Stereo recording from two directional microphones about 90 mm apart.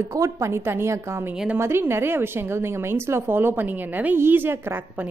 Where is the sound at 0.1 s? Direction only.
35° right (ahead or behind).